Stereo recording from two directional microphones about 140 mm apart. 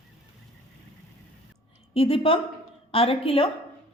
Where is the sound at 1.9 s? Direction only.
40° left (ahead or behind).